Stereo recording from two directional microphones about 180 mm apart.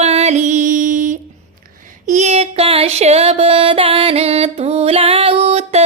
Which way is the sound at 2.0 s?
40° right (ahead or behind).